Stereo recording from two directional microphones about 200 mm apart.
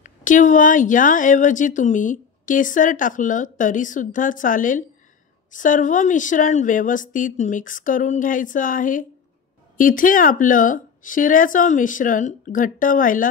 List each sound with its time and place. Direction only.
0.0 s speech: 40° left (ahead or behind)